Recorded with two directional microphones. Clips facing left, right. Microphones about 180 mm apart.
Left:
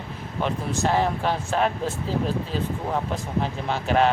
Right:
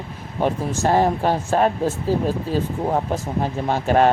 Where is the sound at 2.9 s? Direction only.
45° right (ahead or behind).